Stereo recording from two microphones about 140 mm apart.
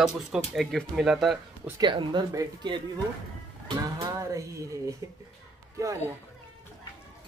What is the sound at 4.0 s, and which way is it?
Speech, 20° right (ahead or behind).